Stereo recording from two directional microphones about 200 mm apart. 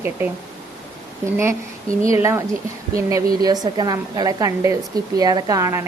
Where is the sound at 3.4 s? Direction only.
20° right (ahead or behind).